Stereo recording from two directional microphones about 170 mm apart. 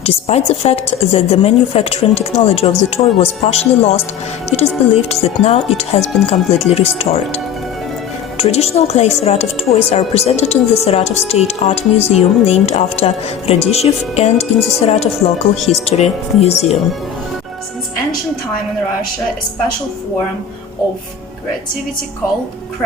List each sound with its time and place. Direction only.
0.0 s speech: 35° left (ahead or behind)